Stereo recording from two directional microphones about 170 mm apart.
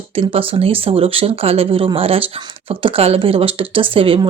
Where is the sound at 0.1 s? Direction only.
35° right (ahead or behind).